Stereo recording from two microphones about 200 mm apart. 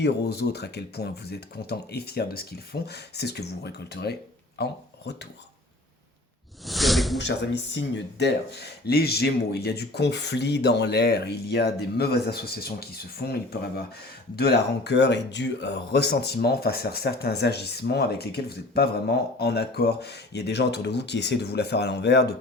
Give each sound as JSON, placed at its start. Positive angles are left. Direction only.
{"t": 0.0, "sound": "speech", "side_deg": 55}
{"t": 6.7, "sound": "snake", "side_deg": 0}
{"t": 7.2, "sound": "speech", "side_deg": 60}